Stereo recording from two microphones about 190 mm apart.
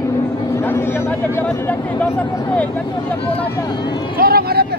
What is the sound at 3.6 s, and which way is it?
Speech, 20° left (ahead or behind).